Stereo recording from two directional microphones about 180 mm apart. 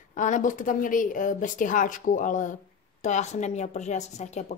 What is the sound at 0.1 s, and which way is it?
A woman's voice, 45° left (ahead or behind).